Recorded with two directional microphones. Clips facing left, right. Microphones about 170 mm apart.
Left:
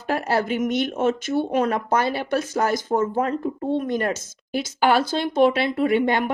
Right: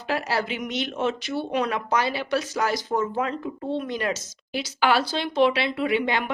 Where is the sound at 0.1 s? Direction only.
50° left (ahead or behind).